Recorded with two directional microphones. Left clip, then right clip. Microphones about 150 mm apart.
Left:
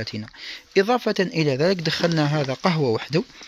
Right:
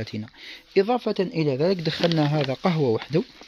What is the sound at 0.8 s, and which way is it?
Speech, 10° left (ahead or behind).